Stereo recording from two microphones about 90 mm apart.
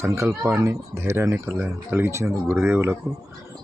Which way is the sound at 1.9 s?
25° right (ahead or behind).